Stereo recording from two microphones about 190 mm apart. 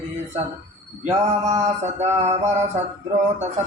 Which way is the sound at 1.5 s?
35° right (ahead or behind).